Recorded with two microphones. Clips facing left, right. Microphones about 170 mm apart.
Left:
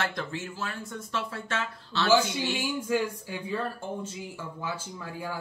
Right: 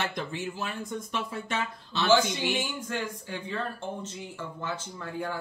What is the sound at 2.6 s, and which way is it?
Speech, 10° left (ahead or behind).